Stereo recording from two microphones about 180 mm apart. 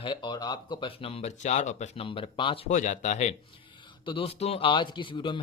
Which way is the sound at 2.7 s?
45° left (ahead or behind).